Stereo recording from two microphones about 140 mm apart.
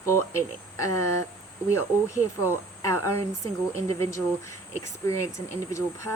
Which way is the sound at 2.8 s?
20° left (ahead or behind).